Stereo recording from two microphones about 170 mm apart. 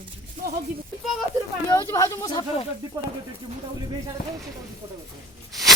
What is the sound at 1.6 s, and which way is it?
Speech, 15° left (ahead or behind).